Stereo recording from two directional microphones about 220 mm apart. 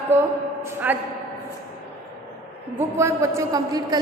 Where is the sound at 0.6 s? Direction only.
10° right (ahead or behind).